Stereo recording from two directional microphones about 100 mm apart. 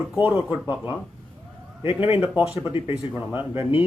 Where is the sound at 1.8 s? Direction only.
65° left (ahead or behind).